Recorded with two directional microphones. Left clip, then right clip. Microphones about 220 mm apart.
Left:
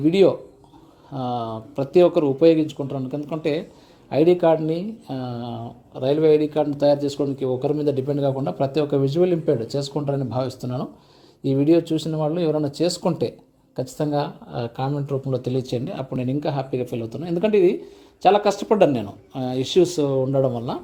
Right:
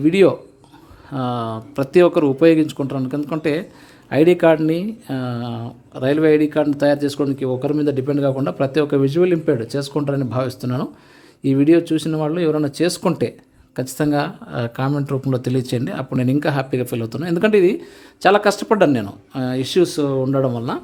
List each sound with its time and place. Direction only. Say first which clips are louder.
0.0 s speech: right 3 dB; 15° right (ahead or behind)